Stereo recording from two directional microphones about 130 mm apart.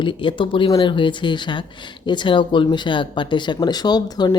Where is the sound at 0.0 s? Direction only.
40° left (ahead or behind).